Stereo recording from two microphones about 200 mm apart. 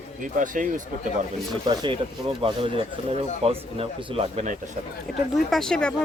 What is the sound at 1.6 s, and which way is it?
Speech, 20° right (ahead or behind).